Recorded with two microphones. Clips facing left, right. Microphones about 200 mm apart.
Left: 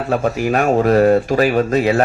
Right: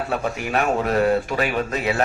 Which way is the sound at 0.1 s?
40° left (ahead or behind).